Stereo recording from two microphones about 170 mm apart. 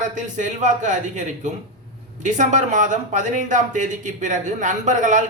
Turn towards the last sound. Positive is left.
turn(degrees=-50)  # may be behind; listen again after turning